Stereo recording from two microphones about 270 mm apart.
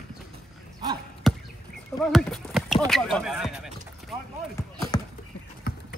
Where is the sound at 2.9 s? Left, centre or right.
Centre.